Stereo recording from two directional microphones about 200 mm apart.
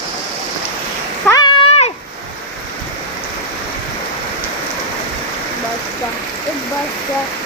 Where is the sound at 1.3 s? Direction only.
20° left (ahead or behind).